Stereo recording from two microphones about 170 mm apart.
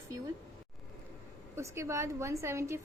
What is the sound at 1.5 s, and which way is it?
A woman's voice, 15° right (ahead or behind).